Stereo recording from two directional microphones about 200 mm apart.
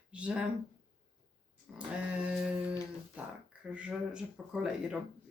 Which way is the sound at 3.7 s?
5° right (ahead or behind).